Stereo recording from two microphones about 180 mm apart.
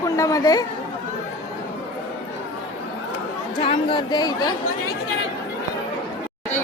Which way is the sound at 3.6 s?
30° left (ahead or behind).